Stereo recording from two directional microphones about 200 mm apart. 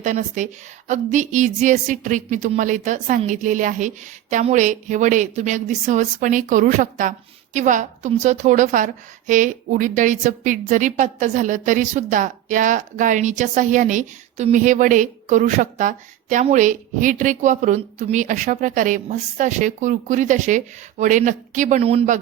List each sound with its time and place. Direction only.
0.0 s a woman's voice: 40° right (ahead or behind)